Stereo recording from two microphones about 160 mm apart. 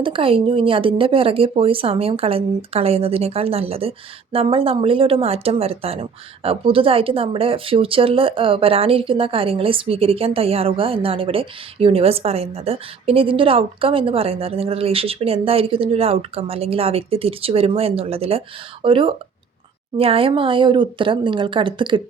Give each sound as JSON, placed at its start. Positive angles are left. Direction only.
{"t": 0.0, "sound": "speech", "side_deg": -35}